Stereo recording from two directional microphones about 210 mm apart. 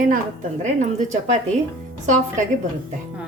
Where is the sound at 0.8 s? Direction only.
30° right (ahead or behind).